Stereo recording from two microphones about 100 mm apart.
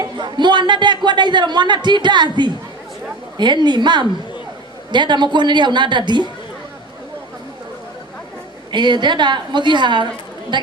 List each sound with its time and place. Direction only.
0.0 s speech: 50° right (ahead or behind)
8.7 s speech: 50° right (ahead or behind)